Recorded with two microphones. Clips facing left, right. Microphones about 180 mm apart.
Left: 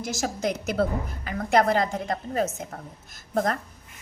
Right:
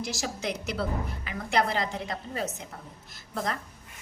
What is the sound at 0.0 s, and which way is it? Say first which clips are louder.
A woman's voice: left 5 dB; 45° left (ahead or behind).